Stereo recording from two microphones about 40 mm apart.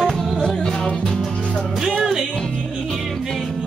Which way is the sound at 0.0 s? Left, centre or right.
Centre.